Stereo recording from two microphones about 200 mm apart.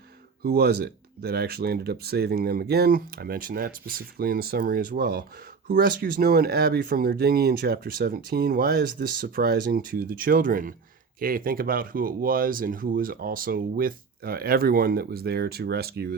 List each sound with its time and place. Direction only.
0.4 s speech: 50° right (ahead or behind)